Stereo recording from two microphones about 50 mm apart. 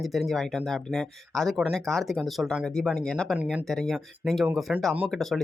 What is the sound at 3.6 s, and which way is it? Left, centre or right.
Speech, centre.